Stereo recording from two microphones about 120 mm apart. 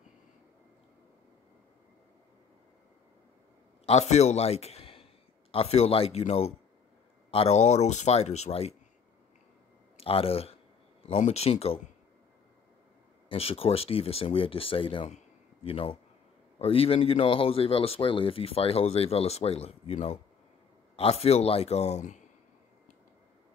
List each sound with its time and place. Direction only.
3.8 s speech: 65° left (ahead or behind)
9.9 s speech: 50° left (ahead or behind)
13.3 s speech: 55° left (ahead or behind); by 22.2 s 80° left